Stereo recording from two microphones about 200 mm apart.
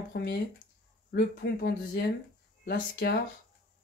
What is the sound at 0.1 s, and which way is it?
Speech, 50° left (ahead or behind).